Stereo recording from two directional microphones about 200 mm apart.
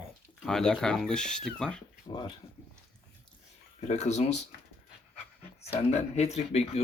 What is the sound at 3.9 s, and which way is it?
Speech, 35° left (ahead or behind).